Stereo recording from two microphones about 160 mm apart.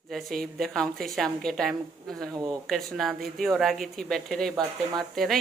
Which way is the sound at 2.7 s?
Centre (ahead or behind).